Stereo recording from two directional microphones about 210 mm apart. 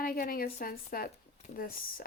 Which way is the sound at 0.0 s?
45° left (ahead or behind).